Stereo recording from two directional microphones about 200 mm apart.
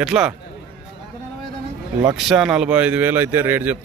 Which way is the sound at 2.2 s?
Centre (ahead or behind).